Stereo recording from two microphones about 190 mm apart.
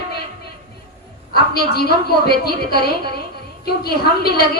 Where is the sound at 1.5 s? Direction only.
55° left (ahead or behind).